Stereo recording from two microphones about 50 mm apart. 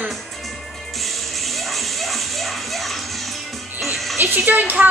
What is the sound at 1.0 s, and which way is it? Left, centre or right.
Music, centre.